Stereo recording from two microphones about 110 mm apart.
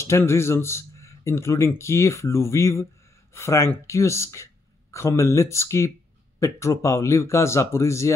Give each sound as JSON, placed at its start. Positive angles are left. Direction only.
{"t": 0.0, "sound": "speech", "side_deg": 25}